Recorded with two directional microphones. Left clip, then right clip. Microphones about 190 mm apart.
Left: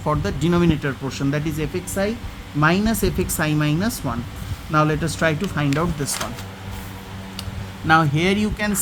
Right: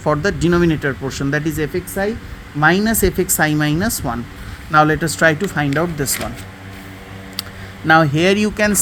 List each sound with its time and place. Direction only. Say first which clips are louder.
0.0 s speech: right 6 dB; 20° right (ahead or behind)
7.9 s speech: right 5 dB; 25° right (ahead or behind)